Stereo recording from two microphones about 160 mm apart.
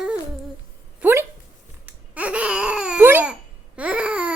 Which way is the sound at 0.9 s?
15° right (ahead or behind).